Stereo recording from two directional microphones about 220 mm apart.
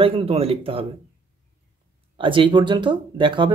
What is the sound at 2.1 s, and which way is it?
Speech, 20° right (ahead or behind).